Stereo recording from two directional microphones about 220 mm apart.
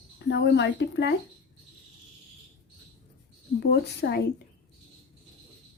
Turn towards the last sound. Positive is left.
turn(degrees=45)  # may be behind; listen again after turning